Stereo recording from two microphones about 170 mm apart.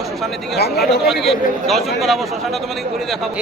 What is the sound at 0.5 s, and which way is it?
Speech, 70° left (ahead or behind).